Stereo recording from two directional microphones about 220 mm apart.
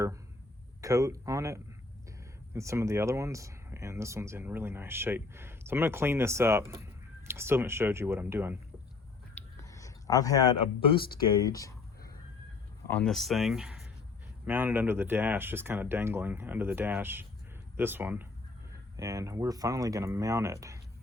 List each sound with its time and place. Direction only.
0.8 s speech: 15° right (ahead or behind)
9.3 s a sound: 15° left (ahead or behind)
12.9 s speech: 5° left (ahead or behind); by 20.7 s 15° right (ahead or behind)